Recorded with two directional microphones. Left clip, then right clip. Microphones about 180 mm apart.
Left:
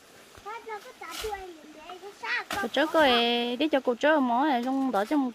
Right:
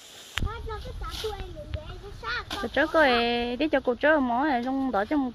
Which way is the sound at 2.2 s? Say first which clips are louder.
Left 1 dB; 45° left (ahead or behind).